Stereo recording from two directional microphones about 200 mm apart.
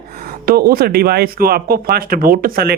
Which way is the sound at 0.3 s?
50° right (ahead or behind).